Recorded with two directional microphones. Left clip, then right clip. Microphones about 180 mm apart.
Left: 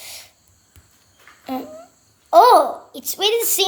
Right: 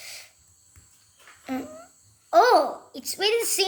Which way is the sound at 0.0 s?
5° right (ahead or behind).